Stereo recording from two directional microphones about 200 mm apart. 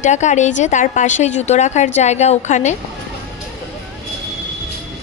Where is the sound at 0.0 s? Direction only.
35° left (ahead or behind).